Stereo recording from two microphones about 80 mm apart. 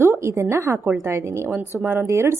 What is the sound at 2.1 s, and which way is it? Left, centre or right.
Speech, right.